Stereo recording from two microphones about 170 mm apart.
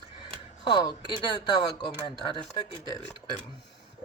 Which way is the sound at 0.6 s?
25° left (ahead or behind).